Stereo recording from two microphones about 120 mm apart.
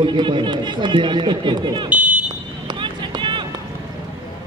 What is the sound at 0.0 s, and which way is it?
A man's voice, 45° right (ahead or behind).